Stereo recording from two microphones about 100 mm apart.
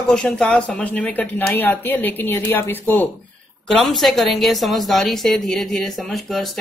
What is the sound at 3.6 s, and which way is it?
Speech, centre (ahead or behind).